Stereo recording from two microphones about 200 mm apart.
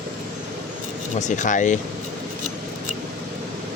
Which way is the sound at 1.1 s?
35° left (ahead or behind).